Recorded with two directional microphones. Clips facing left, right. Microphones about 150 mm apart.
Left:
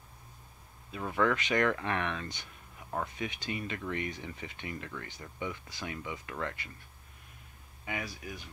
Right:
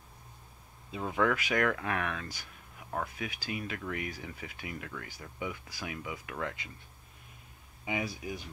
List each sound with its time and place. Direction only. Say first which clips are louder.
0.9 s speech: even; 10° right (ahead or behind)
7.8 s speech: right 4 dB; 15° right (ahead or behind)